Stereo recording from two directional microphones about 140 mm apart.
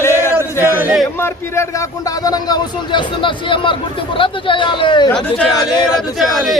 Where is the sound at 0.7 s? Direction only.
15° right (ahead or behind).